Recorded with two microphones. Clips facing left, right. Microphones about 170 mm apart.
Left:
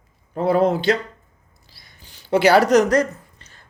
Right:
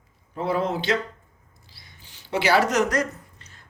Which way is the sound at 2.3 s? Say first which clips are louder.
Left 7 dB; 45° left (ahead or behind).